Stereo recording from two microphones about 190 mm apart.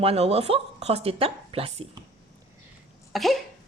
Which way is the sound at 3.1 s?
Centre (ahead or behind).